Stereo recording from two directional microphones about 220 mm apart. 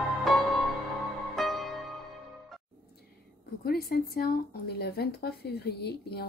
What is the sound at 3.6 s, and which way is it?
Speech, 45° left (ahead or behind).